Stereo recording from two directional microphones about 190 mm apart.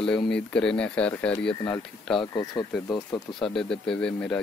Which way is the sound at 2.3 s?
20° left (ahead or behind).